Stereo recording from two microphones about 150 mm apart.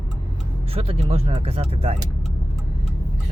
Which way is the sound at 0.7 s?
40° right (ahead or behind).